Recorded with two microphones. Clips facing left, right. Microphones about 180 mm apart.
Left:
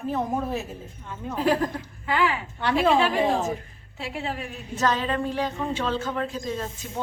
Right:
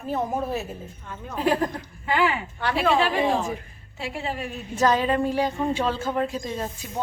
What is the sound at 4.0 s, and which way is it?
Speech, centre (ahead or behind).